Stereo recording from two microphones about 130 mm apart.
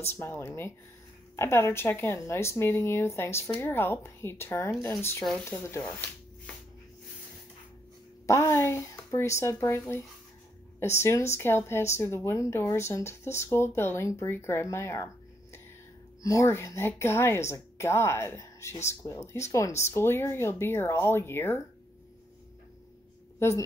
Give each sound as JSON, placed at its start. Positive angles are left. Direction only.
{"t": 0.1, "sound": "a woman's voice", "side_deg": 15}
{"t": 8.3, "sound": "a woman's voice", "side_deg": 20}
{"t": 16.2, "sound": "a woman's voice", "side_deg": 25}
{"t": 23.4, "sound": "a woman's voice", "side_deg": 20}